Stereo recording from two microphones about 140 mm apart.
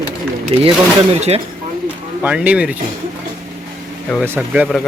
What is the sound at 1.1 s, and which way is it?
Speech, 50° right (ahead or behind).